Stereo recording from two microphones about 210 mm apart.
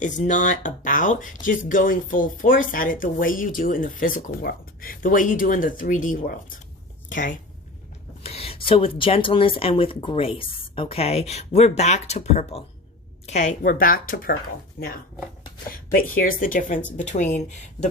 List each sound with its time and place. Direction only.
0.0 s speech: 35° left (ahead or behind)
8.2 s speech: 30° left (ahead or behind)